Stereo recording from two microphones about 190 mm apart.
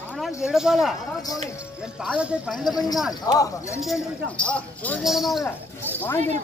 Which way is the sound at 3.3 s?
20° left (ahead or behind).